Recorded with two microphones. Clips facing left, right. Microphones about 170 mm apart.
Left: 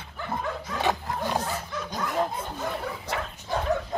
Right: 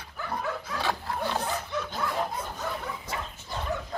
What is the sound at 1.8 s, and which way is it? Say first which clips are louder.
Bow-wow: left 7 dB; 20° left (ahead or behind).